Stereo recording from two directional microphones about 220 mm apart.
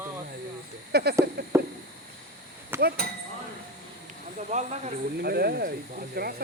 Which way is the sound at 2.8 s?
45° right (ahead or behind).